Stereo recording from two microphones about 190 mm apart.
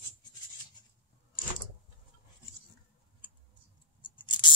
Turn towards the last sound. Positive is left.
turn(degrees=25)  # may be behind; listen again after turning